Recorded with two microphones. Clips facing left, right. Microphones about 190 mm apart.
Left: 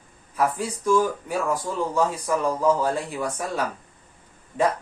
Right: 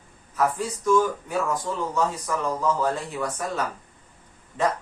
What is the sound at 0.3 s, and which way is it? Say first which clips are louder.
Speech: even; 10° left (ahead or behind).